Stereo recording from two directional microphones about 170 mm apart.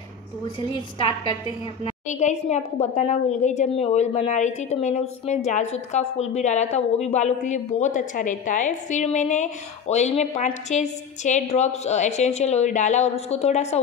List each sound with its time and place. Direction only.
0.6 s a woman's voice: 30° left (ahead or behind)
2.0 s a woman's voice: 45° left (ahead or behind)